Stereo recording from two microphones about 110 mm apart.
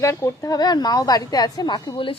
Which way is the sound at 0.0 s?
25° left (ahead or behind).